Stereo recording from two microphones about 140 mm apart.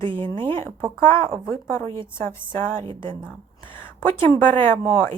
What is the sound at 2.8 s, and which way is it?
Speech, 35° right (ahead or behind).